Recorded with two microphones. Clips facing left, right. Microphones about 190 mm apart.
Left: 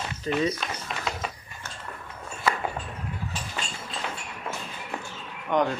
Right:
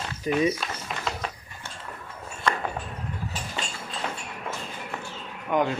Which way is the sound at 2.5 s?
5° left (ahead or behind).